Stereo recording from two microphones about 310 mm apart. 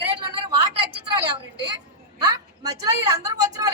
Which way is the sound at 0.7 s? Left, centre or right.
Right.